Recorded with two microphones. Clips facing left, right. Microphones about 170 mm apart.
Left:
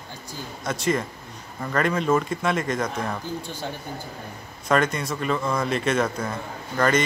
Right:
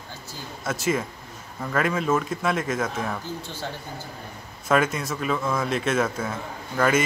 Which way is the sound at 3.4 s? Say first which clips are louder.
Left 1 dB; 15° left (ahead or behind).